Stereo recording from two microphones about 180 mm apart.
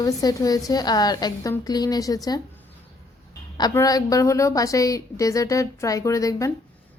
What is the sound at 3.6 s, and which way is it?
A woman's voice, 20° left (ahead or behind).